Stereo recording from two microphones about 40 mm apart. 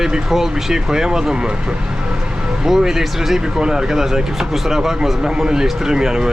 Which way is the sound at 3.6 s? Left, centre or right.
Centre.